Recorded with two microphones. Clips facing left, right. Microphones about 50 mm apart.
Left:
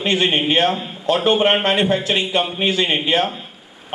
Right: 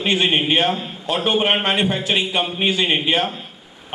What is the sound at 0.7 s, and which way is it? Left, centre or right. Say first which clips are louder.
A man's voice: left 4 dB; centre.